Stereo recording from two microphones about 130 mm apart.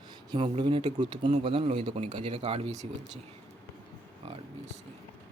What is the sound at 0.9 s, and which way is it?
Speech, 35° right (ahead or behind).